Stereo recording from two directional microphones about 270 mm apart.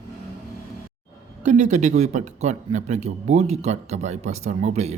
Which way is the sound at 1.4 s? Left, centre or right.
Right.